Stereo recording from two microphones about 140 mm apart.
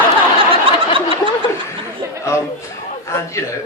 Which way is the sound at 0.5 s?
40° right (ahead or behind).